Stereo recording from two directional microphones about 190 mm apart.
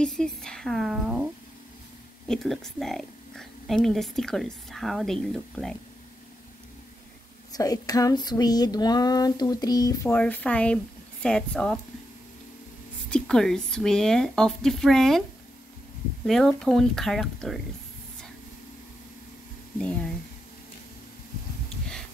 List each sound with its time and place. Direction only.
0.0 s a sound: 5° left (ahead or behind)
2.2 s a woman's voice: centre (ahead or behind)
7.5 s a sound: 20° left (ahead or behind)
11.2 s a woman's voice: 5° left (ahead or behind)
13.1 s a woman's voice: 5° left (ahead or behind)
16.3 s a woman's voice: centre (ahead or behind)
19.8 s a woman's voice: 5° left (ahead or behind)